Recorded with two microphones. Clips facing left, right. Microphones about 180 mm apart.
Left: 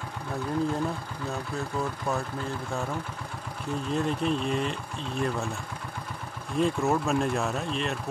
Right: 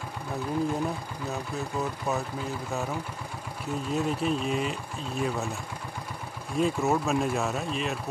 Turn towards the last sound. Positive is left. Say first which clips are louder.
# even
turn(degrees=-5)  # may be behind; listen again after turning